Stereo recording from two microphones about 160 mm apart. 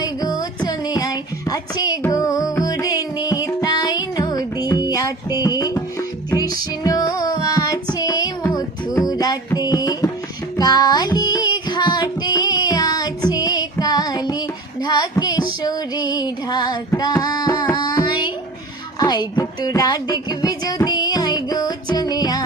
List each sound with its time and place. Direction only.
0.0 s music: 20° left (ahead or behind)
17.0 s carnatic music: 25° left (ahead or behind)
18.9 s music: 25° left (ahead or behind)